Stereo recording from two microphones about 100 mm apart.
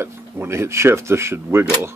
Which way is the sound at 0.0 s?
25° right (ahead or behind).